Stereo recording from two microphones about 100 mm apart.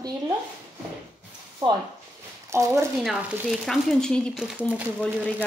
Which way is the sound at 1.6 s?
40° right (ahead or behind).